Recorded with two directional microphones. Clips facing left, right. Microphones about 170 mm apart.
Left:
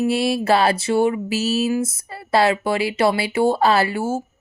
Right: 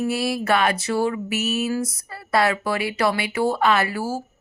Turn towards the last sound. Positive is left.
turn(degrees=25)  # may be behind; listen again after turning